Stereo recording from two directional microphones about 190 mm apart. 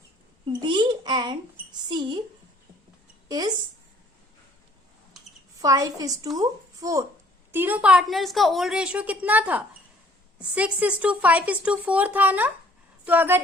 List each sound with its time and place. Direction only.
0.4 s a child's voice: 25° right (ahead or behind)
3.2 s a woman's voice: 20° right (ahead or behind)
5.5 s a woman's voice: 20° right (ahead or behind)